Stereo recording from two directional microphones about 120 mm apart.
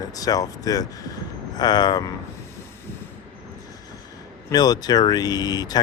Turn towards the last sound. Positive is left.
turn(degrees=35)  # may be behind; listen again after turning